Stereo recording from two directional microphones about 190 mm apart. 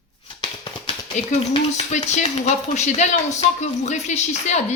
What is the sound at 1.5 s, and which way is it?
Speech, 35° left (ahead or behind).